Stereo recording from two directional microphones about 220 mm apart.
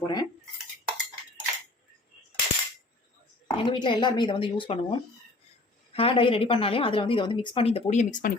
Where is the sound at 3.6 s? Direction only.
20° left (ahead or behind).